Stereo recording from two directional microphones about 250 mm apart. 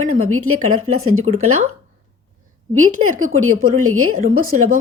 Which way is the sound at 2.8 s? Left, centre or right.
Right.